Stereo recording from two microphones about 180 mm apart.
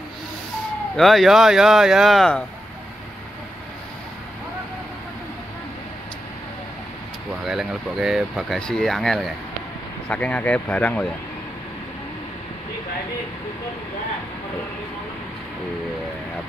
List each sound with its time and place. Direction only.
0.9 s speech: centre (ahead or behind)
7.4 s speech: centre (ahead or behind)